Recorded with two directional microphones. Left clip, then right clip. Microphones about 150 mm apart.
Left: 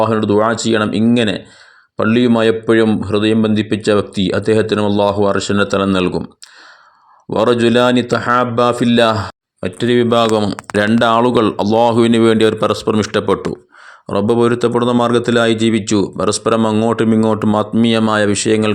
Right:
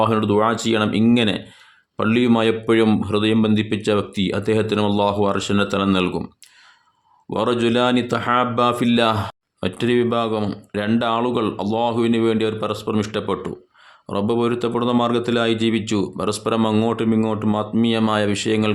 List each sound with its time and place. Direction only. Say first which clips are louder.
0.0 s speech: left 4 dB; 25° left (ahead or behind)
7.3 s speech: left 7 dB; 35° left (ahead or behind)
9.6 s speech: left 3 dB; 15° left (ahead or behind)
9.8 s speech: left 5 dB; 30° left (ahead or behind)
10.1 s speech: left 8 dB; 40° left (ahead or behind)